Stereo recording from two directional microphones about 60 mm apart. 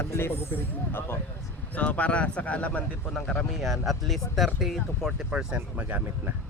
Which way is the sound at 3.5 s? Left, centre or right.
Centre.